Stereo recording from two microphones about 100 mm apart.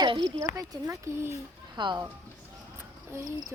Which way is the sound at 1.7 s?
50° right (ahead or behind).